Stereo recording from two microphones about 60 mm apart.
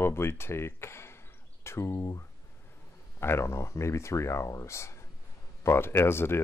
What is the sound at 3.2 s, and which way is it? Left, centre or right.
Speech, left.